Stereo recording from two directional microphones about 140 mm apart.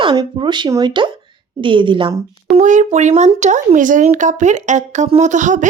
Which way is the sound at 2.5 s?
60° right (ahead or behind).